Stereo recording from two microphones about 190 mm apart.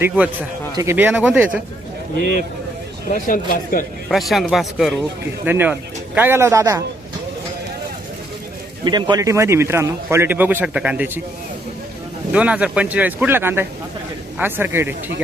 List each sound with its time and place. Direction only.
0.2 s speech: 10° right (ahead or behind)
3.1 s speech: 45° left (ahead or behind)
4.1 s speech: centre (ahead or behind); by 6.8 s 15° right (ahead or behind)
8.8 s speech: 25° right (ahead or behind)
12.3 s speech: 5° right (ahead or behind)